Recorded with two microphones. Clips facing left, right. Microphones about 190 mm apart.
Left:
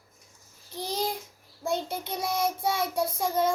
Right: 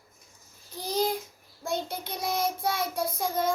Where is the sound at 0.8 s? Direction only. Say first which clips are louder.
Right 3 dB; centre (ahead or behind).